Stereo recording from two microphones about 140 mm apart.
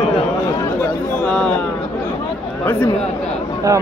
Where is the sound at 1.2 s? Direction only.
5° left (ahead or behind).